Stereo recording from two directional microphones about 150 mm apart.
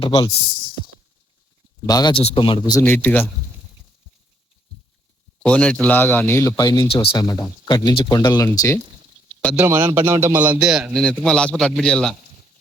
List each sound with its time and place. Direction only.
0.0 s speech: 30° left (ahead or behind)
1.9 s speech: 25° left (ahead or behind)
2.1 s speech: 35° left (ahead or behind)
2.8 s a man's voice: 10° left (ahead or behind)
5.5 s a man's voice: 5° left (ahead or behind); by 6.8 s 25° left (ahead or behind)
6.8 s speech: 40° left (ahead or behind)
7.1 s speech: 25° left (ahead or behind)
9.6 s a man's voice: 15° right (ahead or behind); by 12.1 s 5° left (ahead or behind)